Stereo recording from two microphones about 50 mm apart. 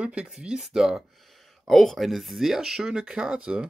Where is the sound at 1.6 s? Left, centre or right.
Centre.